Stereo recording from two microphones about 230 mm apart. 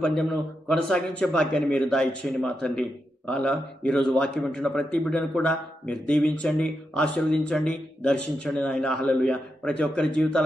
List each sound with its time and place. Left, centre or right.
0.0 s a man's voice: centre